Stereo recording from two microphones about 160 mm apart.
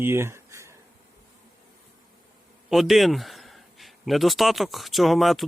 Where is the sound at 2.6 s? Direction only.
Centre (ahead or behind).